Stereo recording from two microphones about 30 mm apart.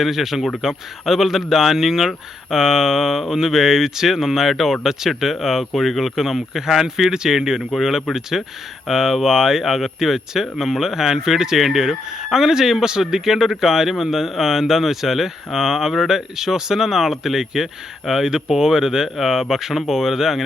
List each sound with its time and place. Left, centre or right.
0.0 s speech: centre
1.0 s speech: centre